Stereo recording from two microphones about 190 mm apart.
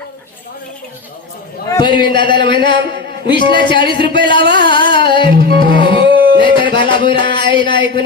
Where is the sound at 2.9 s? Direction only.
60° right (ahead or behind).